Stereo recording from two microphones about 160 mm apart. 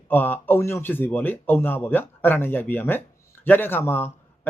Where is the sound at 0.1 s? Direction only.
10° left (ahead or behind).